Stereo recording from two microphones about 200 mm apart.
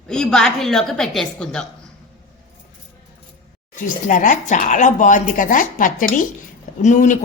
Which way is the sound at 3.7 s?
40° left (ahead or behind).